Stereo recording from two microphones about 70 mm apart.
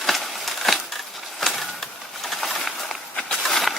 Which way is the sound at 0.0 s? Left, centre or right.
Centre.